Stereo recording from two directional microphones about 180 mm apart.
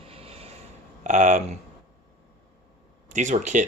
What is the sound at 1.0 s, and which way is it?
Speech, 45° right (ahead or behind).